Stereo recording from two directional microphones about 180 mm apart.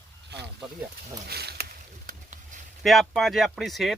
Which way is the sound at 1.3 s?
65° right (ahead or behind).